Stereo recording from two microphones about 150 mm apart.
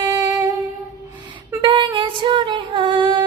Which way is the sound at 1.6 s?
35° right (ahead or behind).